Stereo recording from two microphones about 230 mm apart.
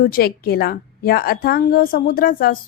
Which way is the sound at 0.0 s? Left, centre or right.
Left.